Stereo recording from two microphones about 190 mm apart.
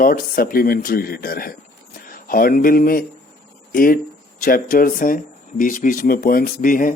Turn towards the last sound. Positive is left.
turn(degrees=45)  # may be behind; listen again after turning